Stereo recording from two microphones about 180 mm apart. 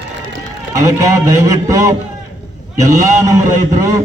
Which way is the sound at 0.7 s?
20° right (ahead or behind).